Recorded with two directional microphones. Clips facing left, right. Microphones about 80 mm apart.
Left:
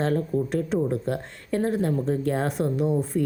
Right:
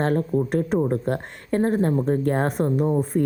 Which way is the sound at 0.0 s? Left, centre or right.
Right.